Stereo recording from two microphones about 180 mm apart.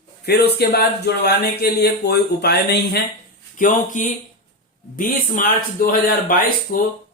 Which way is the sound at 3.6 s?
45° left (ahead or behind).